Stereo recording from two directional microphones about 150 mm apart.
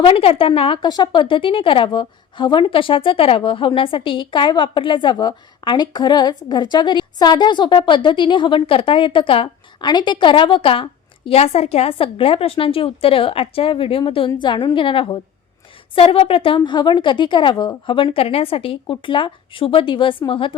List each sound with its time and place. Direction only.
0.0 s a woman's voice: 40° left (ahead or behind)